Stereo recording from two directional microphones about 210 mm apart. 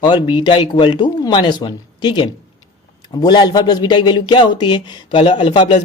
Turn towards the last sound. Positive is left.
turn(degrees=20)  # may be behind; listen again after turning